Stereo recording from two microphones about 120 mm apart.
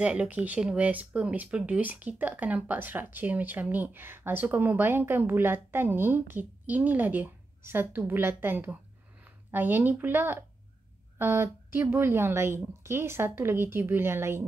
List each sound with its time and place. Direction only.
0.0 s speech: 10° right (ahead or behind)